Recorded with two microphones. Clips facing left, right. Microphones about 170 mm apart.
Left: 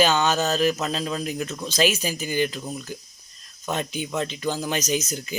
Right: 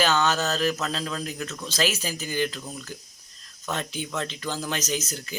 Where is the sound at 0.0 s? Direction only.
15° left (ahead or behind).